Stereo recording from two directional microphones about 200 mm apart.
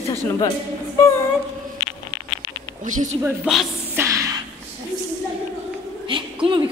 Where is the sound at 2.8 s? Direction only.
40° right (ahead or behind).